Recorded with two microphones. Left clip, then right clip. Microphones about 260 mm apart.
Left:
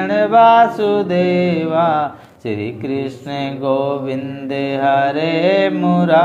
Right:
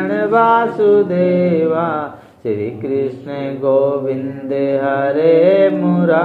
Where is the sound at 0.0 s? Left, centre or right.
Left.